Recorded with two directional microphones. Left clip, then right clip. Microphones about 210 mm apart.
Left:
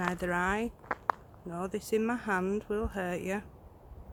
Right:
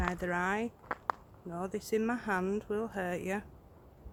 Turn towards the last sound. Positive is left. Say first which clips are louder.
# left 1 dB
turn(degrees=0)  # may be behind; listen again after turning